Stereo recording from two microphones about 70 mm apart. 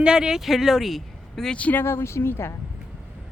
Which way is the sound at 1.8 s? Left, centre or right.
Left.